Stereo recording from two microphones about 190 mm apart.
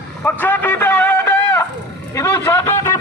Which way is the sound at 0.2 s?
10° left (ahead or behind).